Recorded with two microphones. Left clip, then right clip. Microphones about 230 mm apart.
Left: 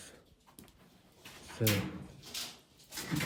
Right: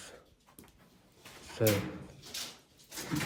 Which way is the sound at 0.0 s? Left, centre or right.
Centre.